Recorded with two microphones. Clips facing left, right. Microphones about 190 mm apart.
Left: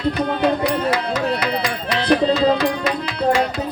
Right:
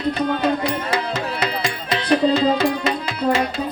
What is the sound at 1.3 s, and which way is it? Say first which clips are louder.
Music: left 2 dB; 25° right (ahead or behind).